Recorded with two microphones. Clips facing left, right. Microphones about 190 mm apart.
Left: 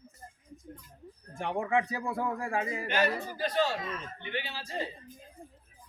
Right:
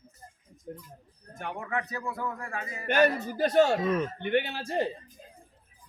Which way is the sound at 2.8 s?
50° right (ahead or behind).